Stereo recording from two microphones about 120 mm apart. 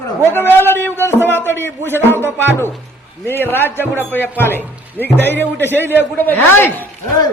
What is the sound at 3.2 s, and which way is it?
A man's voice, 15° left (ahead or behind).